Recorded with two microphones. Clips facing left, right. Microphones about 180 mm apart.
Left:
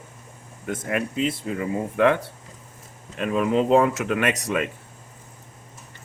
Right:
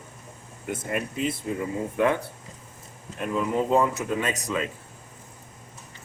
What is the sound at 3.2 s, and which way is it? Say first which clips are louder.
Speech: left 4 dB; 85° left.